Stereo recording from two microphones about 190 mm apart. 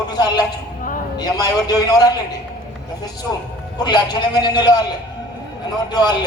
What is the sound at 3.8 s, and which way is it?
A man's voice, 25° left (ahead or behind).